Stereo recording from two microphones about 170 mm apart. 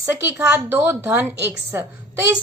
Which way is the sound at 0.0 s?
10° right (ahead or behind).